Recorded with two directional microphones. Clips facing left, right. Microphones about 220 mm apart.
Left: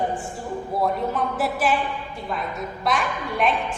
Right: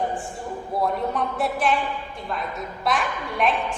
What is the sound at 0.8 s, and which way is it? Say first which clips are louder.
A woman's voice: even; centre (ahead or behind).